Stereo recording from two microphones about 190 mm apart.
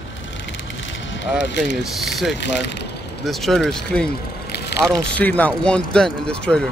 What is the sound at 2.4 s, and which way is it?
Speech, 65° left (ahead or behind).